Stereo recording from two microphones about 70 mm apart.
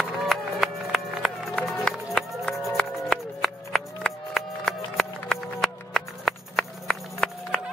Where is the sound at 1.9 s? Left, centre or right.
Centre.